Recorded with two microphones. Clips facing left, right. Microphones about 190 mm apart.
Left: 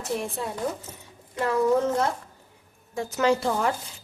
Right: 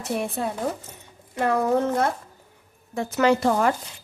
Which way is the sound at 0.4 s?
60° right (ahead or behind).